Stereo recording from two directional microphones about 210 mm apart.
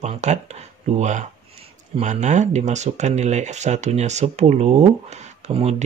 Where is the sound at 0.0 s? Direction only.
35° right (ahead or behind).